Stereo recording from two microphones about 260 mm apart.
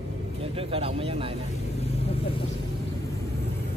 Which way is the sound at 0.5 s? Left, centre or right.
Right.